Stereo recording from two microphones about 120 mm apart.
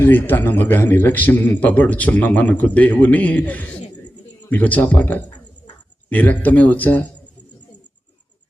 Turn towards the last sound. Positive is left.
turn(degrees=15)  # may be behind; listen again after turning